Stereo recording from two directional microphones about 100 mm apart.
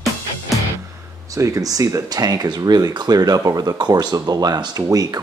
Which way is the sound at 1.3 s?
35° right (ahead or behind).